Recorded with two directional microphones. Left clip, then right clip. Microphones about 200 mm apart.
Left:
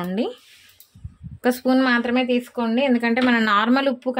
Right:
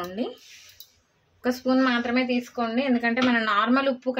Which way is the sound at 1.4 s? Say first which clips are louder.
Left 4 dB; 45° left (ahead or behind).